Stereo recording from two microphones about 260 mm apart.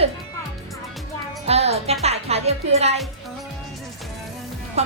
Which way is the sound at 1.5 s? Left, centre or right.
Right.